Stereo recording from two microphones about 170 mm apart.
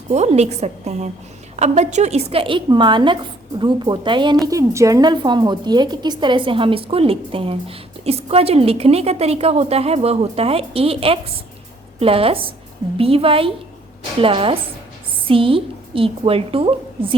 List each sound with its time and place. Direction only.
0.1 s a woman's voice: 40° right (ahead or behind)